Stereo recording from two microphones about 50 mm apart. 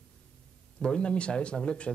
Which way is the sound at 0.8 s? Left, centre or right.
Centre.